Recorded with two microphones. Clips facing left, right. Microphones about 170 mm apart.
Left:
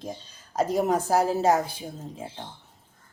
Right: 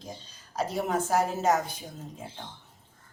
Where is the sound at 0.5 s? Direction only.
45° left (ahead or behind).